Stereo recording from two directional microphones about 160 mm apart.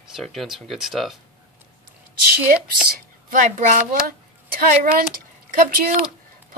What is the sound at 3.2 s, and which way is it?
Speech, 55° right (ahead or behind).